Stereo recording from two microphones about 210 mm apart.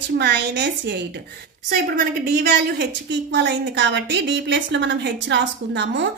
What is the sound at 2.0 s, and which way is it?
A woman's voice, 45° right (ahead or behind).